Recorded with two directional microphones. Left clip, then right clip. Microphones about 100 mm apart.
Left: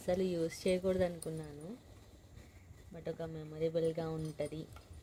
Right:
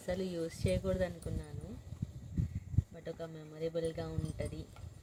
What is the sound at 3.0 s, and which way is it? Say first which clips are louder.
Speech: left 5 dB; 90° left.